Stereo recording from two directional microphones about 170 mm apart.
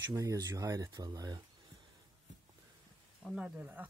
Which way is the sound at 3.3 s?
5° right (ahead or behind).